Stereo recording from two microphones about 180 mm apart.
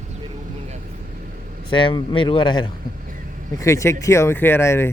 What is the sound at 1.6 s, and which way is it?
Speech, 30° left (ahead or behind).